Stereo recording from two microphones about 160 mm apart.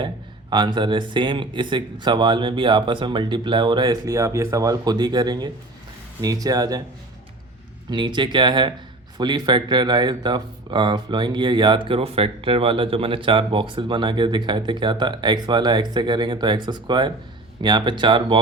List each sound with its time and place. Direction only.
0.5 s speech: 30° right (ahead or behind)
7.9 s speech: 30° right (ahead or behind)